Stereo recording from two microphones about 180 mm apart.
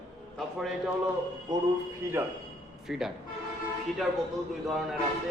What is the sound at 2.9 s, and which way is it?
Speech, 5° right (ahead or behind).